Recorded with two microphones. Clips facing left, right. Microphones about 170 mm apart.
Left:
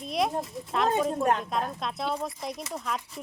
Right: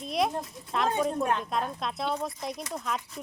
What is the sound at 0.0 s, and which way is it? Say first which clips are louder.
Speech: even; centre (ahead or behind).